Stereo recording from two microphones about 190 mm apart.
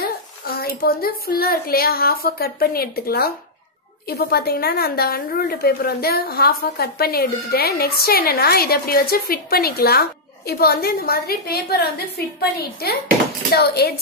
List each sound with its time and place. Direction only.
0.6 s a woman's voice: 50° left (ahead or behind)